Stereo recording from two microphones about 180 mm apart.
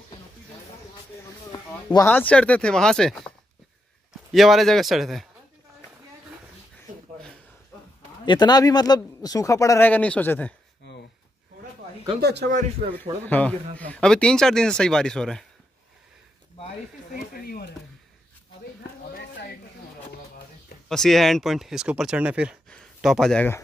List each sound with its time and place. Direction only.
1.5 s a sound: 20° left (ahead or behind)
2.0 s speech: 10° left (ahead or behind)
8.3 s a man's voice: 25° left (ahead or behind)
12.2 s speech: 65° right (ahead or behind)
13.2 s speech: 10° left (ahead or behind)
17.1 s speech: 55° left (ahead or behind)
20.9 s speech: centre (ahead or behind)